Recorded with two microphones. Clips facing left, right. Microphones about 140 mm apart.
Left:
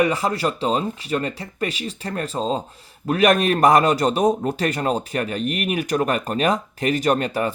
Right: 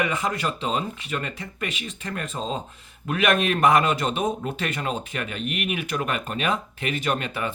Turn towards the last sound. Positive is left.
turn(degrees=40)  # may be behind; listen again after turning